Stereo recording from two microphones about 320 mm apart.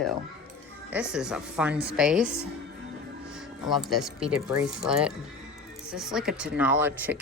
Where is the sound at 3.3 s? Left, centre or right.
Centre.